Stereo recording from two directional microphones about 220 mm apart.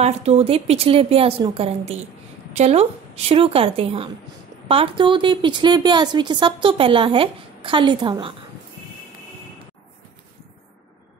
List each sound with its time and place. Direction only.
0.0 s speech: 30° right (ahead or behind)